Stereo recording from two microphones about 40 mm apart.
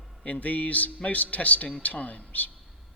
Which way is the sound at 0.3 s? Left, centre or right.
Left.